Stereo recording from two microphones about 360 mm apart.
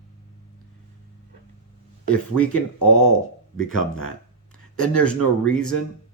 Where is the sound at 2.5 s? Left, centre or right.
Left.